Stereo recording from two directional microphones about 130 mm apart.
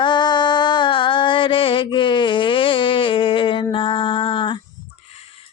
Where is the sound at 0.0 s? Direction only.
35° left (ahead or behind).